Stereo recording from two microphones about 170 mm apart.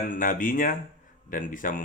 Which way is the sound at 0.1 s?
50° left (ahead or behind).